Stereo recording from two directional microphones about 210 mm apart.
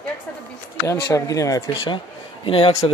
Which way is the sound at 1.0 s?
15° left (ahead or behind).